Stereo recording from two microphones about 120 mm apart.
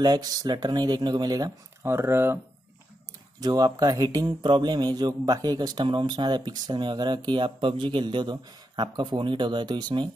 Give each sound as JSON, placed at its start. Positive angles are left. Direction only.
{"t": 0.0, "sound": "a man's voice", "side_deg": -35}
{"t": 1.8, "sound": "speech", "side_deg": -20}
{"t": 3.3, "sound": "a man's voice", "side_deg": -35}